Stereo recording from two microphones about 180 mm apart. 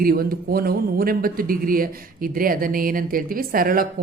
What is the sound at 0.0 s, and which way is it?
A man's voice, 55° right (ahead or behind).